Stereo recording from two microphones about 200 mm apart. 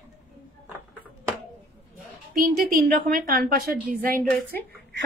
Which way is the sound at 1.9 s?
45° right (ahead or behind).